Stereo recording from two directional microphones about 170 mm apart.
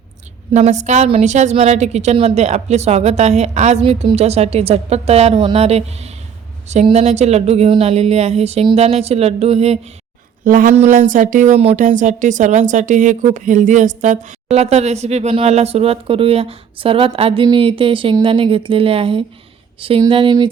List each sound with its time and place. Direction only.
0.5 s speech: 45° right (ahead or behind)
10.4 s speech: 55° right (ahead or behind); by 20.5 s 30° right (ahead or behind)